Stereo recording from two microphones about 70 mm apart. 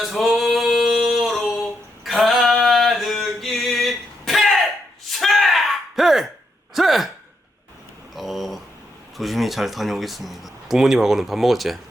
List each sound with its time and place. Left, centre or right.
0.0 s singing: centre
2.0 s male singing: centre
5.0 s gasp: centre
6.7 s sigh: centre
8.1 s a sound: centre
9.1 s speech: centre